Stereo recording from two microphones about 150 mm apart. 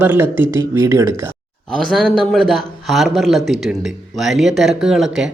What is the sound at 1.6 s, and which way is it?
A man's voice, 5° left (ahead or behind).